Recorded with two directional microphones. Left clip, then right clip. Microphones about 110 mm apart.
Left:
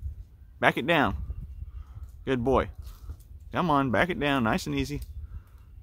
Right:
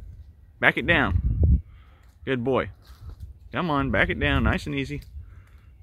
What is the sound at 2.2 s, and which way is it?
Speech, 10° left (ahead or behind).